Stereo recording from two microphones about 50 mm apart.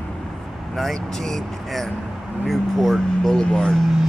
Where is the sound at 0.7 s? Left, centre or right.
Centre.